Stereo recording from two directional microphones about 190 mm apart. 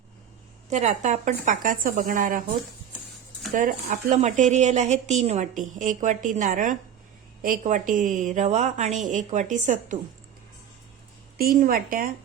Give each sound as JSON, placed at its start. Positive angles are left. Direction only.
{"t": 0.7, "sound": "speech", "side_deg": -40}
{"t": 3.5, "sound": "speech", "side_deg": -45}
{"t": 11.3, "sound": "speech", "side_deg": -50}